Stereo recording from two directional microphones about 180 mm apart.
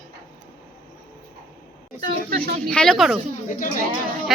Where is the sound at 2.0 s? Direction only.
55° right (ahead or behind).